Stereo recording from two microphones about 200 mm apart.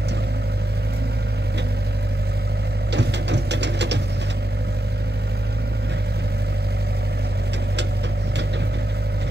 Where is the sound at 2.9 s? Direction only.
60° right (ahead or behind).